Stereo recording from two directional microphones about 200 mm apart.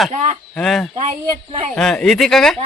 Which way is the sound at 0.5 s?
Centre (ahead or behind).